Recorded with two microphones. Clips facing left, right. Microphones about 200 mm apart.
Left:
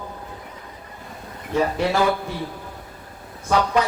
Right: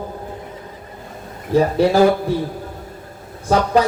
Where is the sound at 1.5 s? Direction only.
35° right (ahead or behind).